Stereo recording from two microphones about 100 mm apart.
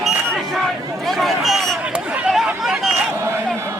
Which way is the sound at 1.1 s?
Centre (ahead or behind).